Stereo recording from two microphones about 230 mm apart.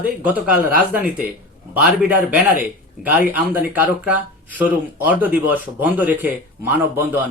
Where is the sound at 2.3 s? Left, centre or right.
Centre.